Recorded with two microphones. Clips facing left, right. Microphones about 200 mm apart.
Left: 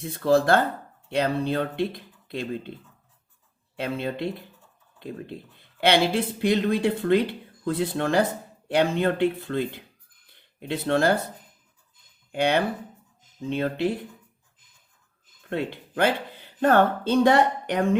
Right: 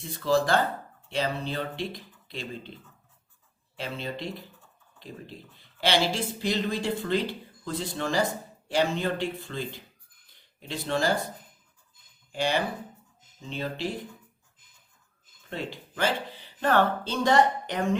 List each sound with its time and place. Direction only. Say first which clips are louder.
0.0 s speech: left 4 dB; 55° left (ahead or behind)
3.8 s speech: left 6 dB; 55° left (ahead or behind)
12.3 s speech: left 5 dB; 60° left (ahead or behind)
15.4 s speech: left 6 dB; 55° left (ahead or behind)